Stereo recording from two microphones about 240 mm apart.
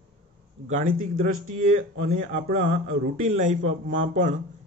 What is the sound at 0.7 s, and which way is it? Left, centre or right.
A man's voice, right.